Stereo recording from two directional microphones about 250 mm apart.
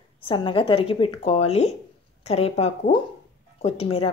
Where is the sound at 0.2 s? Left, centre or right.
Centre.